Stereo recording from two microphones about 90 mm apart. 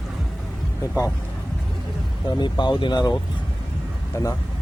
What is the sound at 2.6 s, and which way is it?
Speech, 60° left (ahead or behind).